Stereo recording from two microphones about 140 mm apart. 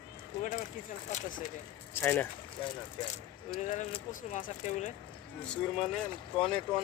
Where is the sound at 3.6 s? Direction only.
55° left (ahead or behind).